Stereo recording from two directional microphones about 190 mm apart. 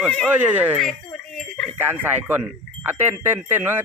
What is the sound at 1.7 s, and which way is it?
Speech, 10° right (ahead or behind).